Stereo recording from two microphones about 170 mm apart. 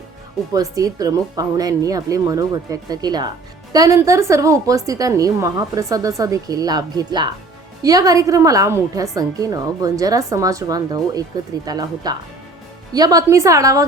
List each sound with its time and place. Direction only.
0.5 s speech: 20° right (ahead or behind)